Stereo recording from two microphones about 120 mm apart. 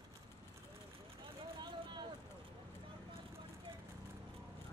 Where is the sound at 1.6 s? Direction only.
40° right (ahead or behind).